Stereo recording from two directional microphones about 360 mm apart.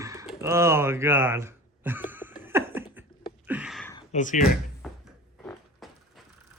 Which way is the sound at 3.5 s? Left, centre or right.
Centre.